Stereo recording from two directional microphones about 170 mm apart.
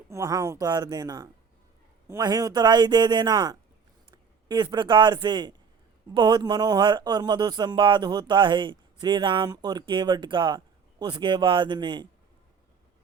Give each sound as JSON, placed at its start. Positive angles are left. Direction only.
{"t": 0.1, "sound": "a man's voice", "side_deg": -20}